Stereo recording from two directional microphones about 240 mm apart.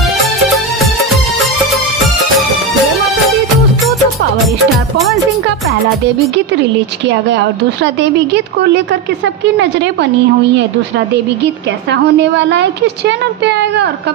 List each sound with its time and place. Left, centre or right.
0.2 s music: centre
4.9 s music: centre
7.1 s a woman's voice: right
11.4 s a woman's voice: right